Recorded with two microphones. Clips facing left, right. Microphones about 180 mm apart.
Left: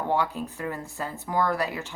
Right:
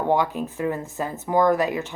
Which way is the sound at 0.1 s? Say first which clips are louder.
Right 4 dB; 15° right (ahead or behind).